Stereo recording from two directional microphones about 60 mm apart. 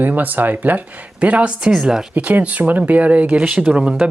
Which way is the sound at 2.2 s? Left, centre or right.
Right.